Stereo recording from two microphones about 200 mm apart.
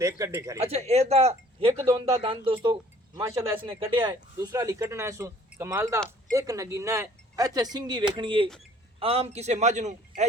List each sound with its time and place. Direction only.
0.0 s speech: 15° right (ahead or behind)
0.6 s speech: 30° right (ahead or behind)
1.8 s speech: 15° right (ahead or behind)
2.1 s speech: 25° right (ahead or behind)
4.0 s speech: 15° right (ahead or behind); by 9.9 s 35° right (ahead or behind)